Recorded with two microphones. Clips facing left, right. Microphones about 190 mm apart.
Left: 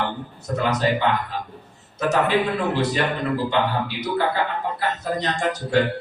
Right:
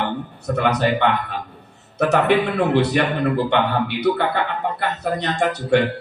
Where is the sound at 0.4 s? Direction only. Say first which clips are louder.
Right 2 dB; 65° right (ahead or behind).